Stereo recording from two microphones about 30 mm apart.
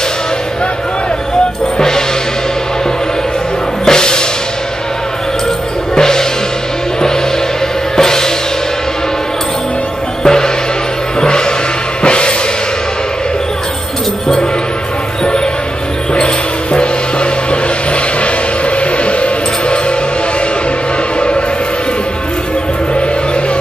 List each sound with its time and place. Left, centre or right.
1.8 s music: left
3.8 s music: left
5.9 s music: centre
7.9 s music: centre
10.2 s music: left
16.7 s music: left
18.8 s music: left